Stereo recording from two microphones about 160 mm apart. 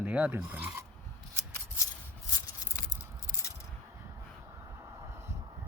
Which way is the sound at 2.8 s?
20° left (ahead or behind).